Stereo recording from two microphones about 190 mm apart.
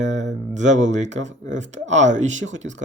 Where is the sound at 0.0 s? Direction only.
40° right (ahead or behind).